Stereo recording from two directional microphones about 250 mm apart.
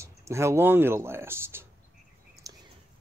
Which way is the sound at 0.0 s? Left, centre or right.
Centre.